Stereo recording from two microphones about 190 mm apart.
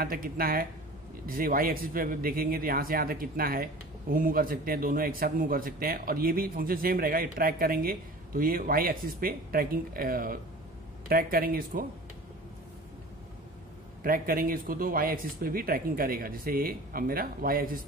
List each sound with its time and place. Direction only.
0.0 s speech: 50° right (ahead or behind)
14.0 s speech: 50° right (ahead or behind)